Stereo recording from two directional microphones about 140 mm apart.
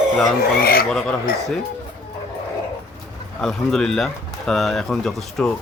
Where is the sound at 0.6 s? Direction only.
90° left.